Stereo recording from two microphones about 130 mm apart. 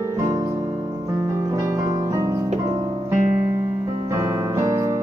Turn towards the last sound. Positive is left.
turn(degrees=-25)  # may be behind; listen again after turning